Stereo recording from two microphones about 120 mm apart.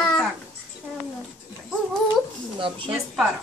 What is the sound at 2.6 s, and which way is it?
Speech, 45° right (ahead or behind).